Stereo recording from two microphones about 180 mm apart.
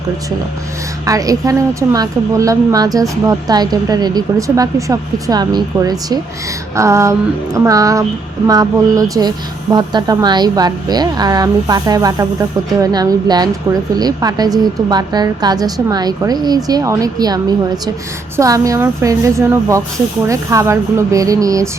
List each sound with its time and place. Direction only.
1.0 s a woman's voice: 20° right (ahead or behind)